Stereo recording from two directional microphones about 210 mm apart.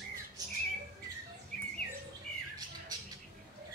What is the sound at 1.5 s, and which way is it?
Bird, 5° left (ahead or behind).